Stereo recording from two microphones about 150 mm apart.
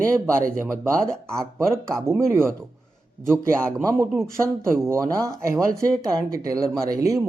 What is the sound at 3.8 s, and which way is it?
Speech, 20° right (ahead or behind).